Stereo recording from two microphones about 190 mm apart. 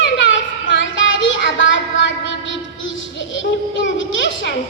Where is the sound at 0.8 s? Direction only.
75° left (ahead or behind).